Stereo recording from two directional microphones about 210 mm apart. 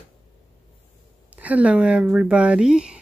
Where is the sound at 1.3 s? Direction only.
5° right (ahead or behind).